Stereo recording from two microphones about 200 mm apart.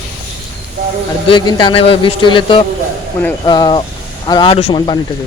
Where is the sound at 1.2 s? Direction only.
25° left (ahead or behind).